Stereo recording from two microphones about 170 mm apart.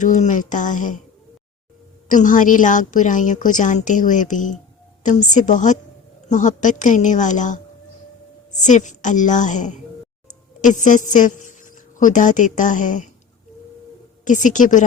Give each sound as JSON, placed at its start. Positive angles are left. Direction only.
{"t": 0.0, "sound": "a woman's voice", "side_deg": 45}
{"t": 2.0, "sound": "a woman's voice", "side_deg": 50}
{"t": 8.6, "sound": "a woman's voice", "side_deg": 45}
{"t": 14.3, "sound": "a woman's voice", "side_deg": 50}